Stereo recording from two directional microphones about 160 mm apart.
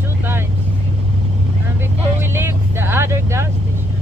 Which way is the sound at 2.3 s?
15° right (ahead or behind).